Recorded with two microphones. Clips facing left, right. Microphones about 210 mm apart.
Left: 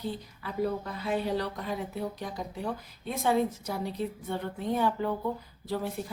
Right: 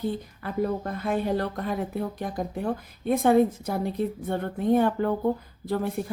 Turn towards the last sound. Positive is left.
turn(degrees=-55)  # may be behind; listen again after turning